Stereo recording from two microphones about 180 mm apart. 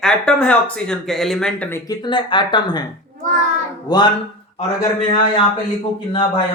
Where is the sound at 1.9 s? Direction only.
25° left (ahead or behind).